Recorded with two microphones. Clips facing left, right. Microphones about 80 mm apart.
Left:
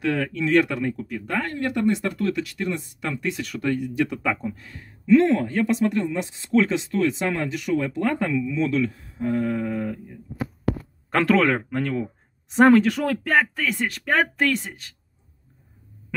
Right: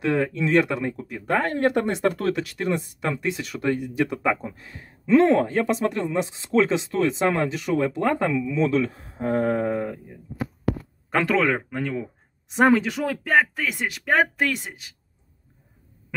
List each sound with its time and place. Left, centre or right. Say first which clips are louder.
0.0 s speech: right 1 dB; centre
1.2 s speech: right 6 dB; right
9.8 s speech: even; centre
11.1 s speech: left 2 dB; centre